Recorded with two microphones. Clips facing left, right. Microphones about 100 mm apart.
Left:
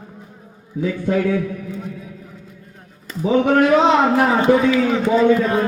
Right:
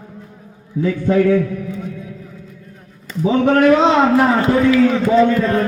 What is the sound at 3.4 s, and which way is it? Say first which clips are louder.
A man's voice: right 3 dB; 15° left (ahead or behind).